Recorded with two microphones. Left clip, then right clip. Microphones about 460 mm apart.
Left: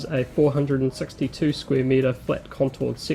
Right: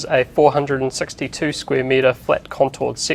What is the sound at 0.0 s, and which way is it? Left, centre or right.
Speech, right.